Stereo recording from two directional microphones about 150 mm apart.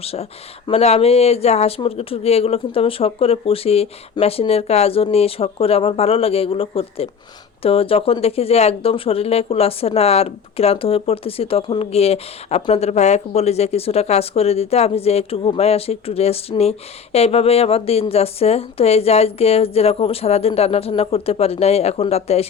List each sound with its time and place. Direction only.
0.0 s speech: 40° left (ahead or behind)